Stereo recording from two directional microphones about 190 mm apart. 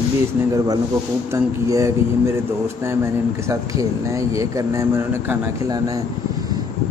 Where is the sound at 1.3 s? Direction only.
15° right (ahead or behind).